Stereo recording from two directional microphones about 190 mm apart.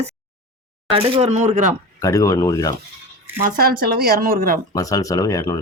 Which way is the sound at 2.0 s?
15° left (ahead or behind).